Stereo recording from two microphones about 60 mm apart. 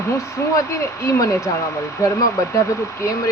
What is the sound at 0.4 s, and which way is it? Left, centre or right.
Speech, left.